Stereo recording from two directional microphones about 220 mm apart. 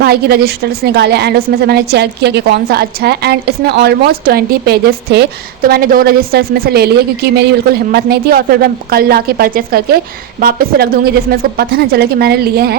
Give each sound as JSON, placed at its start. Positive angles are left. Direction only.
{"t": 0.0, "sound": "a woman's voice", "side_deg": -45}